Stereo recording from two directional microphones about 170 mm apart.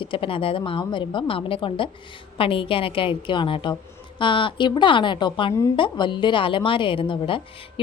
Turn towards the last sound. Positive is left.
turn(degrees=30)  # may be behind; listen again after turning